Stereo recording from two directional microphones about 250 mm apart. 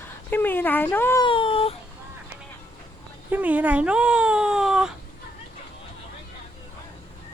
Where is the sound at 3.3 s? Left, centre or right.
Centre.